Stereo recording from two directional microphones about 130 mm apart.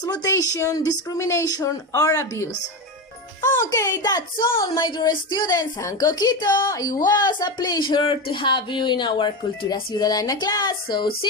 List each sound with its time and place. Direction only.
0.0 s speech: 30° left (ahead or behind)
4.8 s a woman's voice: 35° left (ahead or behind)